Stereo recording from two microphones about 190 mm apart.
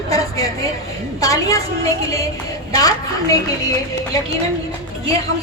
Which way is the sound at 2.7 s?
20° left (ahead or behind).